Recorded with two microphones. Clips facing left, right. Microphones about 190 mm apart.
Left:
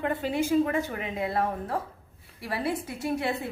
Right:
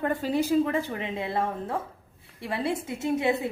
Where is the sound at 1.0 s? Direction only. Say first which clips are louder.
Even; 25° right (ahead or behind).